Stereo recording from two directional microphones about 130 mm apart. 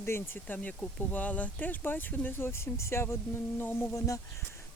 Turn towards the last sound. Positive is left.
turn(degrees=20)  # may be behind; listen again after turning